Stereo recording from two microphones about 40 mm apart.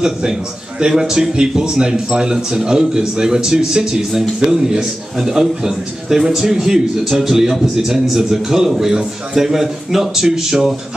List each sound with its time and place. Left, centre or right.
0.7 s speech: centre